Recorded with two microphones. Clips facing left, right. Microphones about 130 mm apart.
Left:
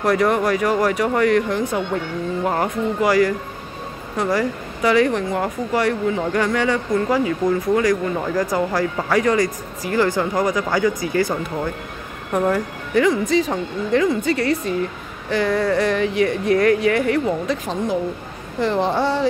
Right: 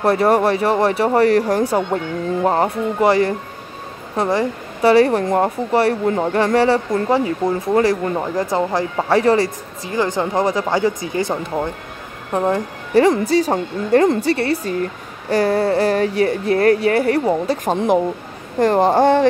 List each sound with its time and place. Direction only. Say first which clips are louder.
0.0 s speech: right 3 dB; 30° right (ahead or behind)
9.9 s speech: even; 20° right (ahead or behind)
13.0 s speech: right 2 dB; 35° right (ahead or behind)
14.3 s speech: right 1 dB; 35° right (ahead or behind)
18.6 s speech: right 6 dB; 50° right (ahead or behind)